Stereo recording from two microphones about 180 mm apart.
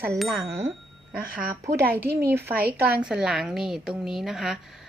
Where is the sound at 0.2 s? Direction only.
Centre (ahead or behind).